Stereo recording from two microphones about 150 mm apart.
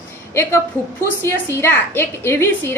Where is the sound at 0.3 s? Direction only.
15° left (ahead or behind).